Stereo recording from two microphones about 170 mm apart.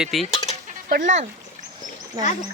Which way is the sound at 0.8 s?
50° right (ahead or behind).